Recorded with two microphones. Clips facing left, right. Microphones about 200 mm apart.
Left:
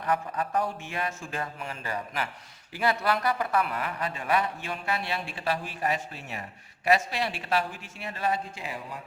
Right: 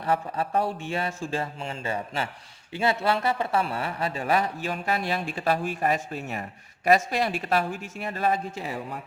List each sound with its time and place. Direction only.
0.0 s speech: 30° right (ahead or behind); by 8.4 s 50° right (ahead or behind)